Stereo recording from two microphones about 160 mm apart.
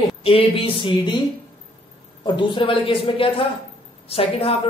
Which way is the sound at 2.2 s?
30° left (ahead or behind).